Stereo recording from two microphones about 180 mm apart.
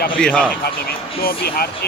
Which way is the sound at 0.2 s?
5° left (ahead or behind).